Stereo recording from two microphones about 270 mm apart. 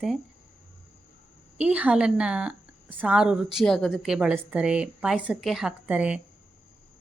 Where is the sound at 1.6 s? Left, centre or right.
Centre.